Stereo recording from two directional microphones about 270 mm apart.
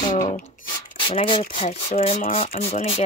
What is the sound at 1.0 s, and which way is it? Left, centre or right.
Speech, centre.